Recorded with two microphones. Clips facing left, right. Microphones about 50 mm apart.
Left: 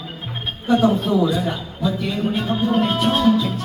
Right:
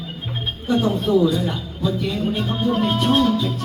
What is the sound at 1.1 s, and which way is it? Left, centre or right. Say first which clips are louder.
Speech: right 1 dB; centre.